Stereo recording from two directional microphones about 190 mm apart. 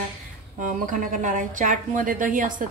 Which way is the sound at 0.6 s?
45° right (ahead or behind).